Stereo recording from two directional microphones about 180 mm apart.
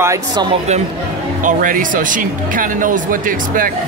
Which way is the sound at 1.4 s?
45° right (ahead or behind).